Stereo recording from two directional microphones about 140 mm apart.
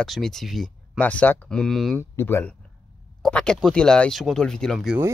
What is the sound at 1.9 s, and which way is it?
Speech, 15° left (ahead or behind).